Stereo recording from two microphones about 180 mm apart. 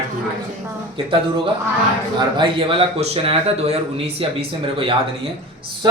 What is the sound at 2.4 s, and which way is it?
A man's voice, 30° right (ahead or behind).